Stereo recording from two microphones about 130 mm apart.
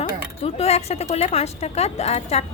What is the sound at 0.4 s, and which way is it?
A woman's voice, 50° left (ahead or behind).